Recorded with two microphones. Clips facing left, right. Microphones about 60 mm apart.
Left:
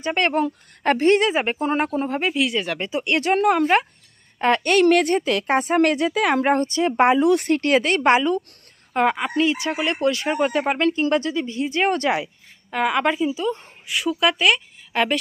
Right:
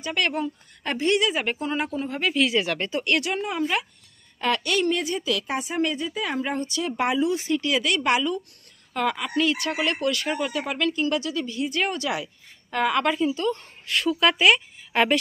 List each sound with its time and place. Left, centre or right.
0.0 s speech: left
0.4 s speech: left
2.3 s speech: centre
2.9 s a woman's voice: centre
3.3 s speech: left
4.4 s speech: left
4.7 s speech: left
5.9 s speech: left
6.4 s speech: left
6.7 s speech: left
7.2 s speech: left
10.4 s speech: left
12.7 s a woman's voice: centre
14.3 s a woman's voice: centre